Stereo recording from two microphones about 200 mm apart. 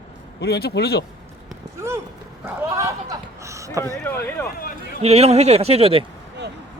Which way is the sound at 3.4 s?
15° right (ahead or behind).